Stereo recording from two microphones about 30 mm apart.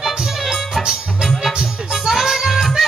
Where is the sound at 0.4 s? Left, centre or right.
Centre.